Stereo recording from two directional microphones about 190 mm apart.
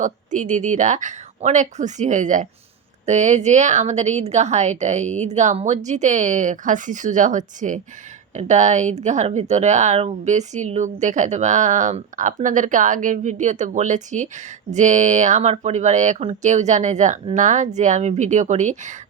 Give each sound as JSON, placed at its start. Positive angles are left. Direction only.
{"t": 0.0, "sound": "speech", "side_deg": -40}